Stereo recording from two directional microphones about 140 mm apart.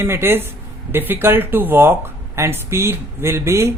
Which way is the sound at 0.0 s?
15° right (ahead or behind).